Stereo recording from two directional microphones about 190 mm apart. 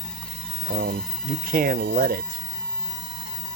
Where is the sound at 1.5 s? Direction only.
45° right (ahead or behind).